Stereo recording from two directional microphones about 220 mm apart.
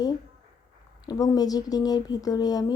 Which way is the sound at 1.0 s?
15° left (ahead or behind).